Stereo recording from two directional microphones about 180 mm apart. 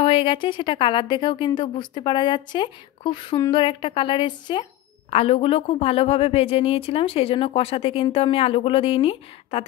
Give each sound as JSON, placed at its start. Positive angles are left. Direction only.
{"t": 0.0, "sound": "a woman's voice", "side_deg": 30}